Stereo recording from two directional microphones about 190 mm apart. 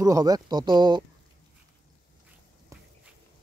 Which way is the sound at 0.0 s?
20° right (ahead or behind).